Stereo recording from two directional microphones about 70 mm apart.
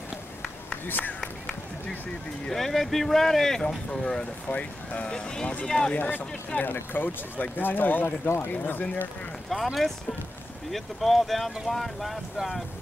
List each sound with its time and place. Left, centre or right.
0.8 s speech: left
1.2 s run: centre
2.4 s speech: centre
5.9 s speech: left
9.5 s speech: centre